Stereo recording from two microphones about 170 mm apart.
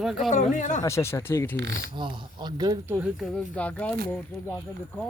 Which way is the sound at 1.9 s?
30° right (ahead or behind).